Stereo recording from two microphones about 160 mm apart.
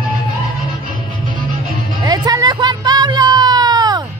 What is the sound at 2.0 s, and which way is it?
Music, 25° right (ahead or behind).